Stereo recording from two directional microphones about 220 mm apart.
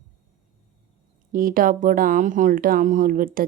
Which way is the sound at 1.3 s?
40° right (ahead or behind).